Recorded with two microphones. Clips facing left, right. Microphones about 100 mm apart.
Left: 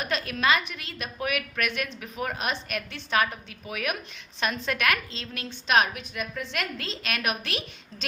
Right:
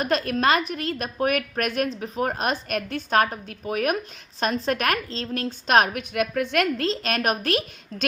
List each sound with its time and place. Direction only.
0.0 s a woman's voice: 40° right (ahead or behind)